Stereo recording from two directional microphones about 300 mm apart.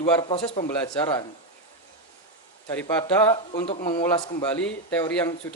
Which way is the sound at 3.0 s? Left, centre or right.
Centre.